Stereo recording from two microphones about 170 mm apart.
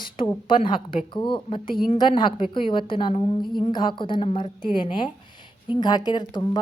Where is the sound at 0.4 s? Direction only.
30° left (ahead or behind).